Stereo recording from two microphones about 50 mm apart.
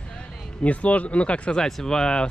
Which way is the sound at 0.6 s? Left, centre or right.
Left.